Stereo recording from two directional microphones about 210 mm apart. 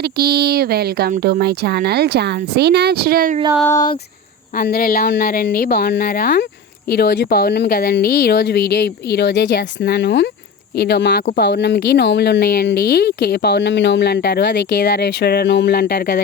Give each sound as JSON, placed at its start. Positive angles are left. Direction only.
{"t": 0.0, "sound": "speech", "side_deg": -50}
{"t": 3.6, "sound": "speech", "side_deg": 10}
{"t": 4.5, "sound": "speech", "side_deg": 45}